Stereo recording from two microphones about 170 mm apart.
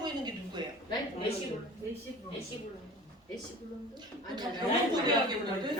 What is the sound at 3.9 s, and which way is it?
Speech, 25° right (ahead or behind).